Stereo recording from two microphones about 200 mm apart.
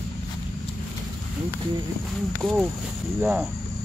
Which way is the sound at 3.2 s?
5° right (ahead or behind).